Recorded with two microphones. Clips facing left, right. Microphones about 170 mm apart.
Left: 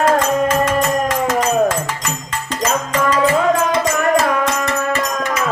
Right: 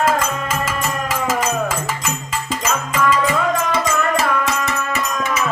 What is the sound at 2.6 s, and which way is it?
Music, 40° left (ahead or behind).